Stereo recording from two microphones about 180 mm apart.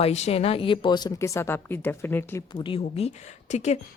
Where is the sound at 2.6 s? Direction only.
30° left (ahead or behind).